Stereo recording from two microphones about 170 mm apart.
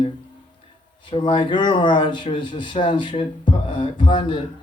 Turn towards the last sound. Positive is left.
turn(degrees=30)  # may be behind; listen again after turning